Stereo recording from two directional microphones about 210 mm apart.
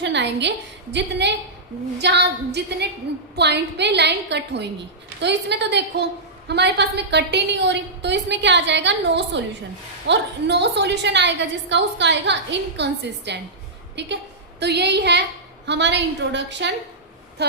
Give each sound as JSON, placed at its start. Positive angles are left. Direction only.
{"t": 0.0, "sound": "a woman's voice", "side_deg": -55}